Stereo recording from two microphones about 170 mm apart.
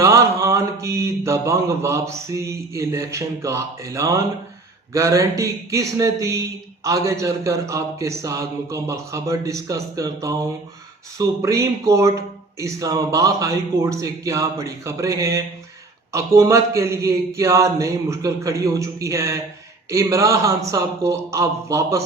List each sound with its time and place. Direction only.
0.0 s mantra: 20° right (ahead or behind)
4.9 s speech: 20° right (ahead or behind)
11.2 s mantra: 20° right (ahead or behind)
12.5 s speech: 20° right (ahead or behind)
16.1 s mantra: 15° right (ahead or behind)